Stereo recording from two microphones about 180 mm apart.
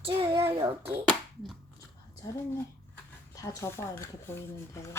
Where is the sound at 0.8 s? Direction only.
30° right (ahead or behind).